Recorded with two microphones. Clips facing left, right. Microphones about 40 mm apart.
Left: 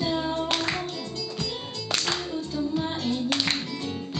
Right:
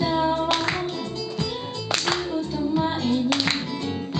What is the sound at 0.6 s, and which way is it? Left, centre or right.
Music, centre.